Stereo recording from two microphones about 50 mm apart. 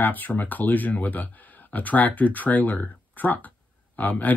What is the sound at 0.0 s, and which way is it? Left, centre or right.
Speech, left.